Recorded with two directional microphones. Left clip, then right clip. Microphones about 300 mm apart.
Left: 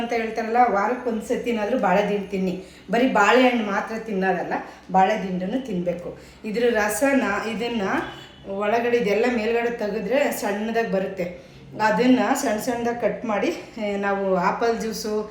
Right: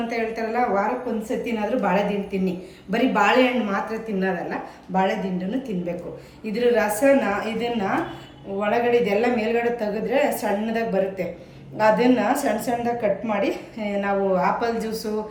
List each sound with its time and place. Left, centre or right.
0.1 s a woman's voice: centre
6.4 s a woman's voice: centre